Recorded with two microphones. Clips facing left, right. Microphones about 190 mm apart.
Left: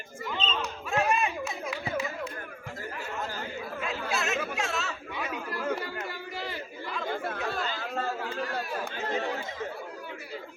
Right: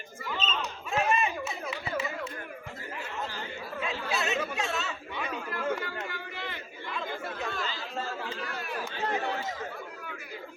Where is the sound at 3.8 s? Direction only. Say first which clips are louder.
Right 1 dB; centre (ahead or behind).